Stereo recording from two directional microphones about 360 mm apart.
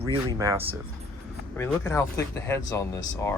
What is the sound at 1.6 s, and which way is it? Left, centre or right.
Speech, centre.